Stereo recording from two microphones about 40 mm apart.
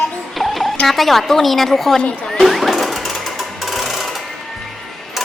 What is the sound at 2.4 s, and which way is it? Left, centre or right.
Ratchet, centre.